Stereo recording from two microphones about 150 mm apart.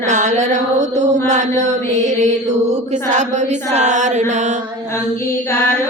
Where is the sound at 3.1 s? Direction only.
50° right (ahead or behind).